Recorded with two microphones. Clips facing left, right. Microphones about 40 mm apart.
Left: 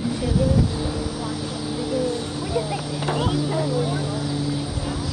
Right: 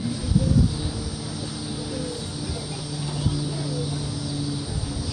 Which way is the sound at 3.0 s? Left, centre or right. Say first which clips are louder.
Left 7 dB; left.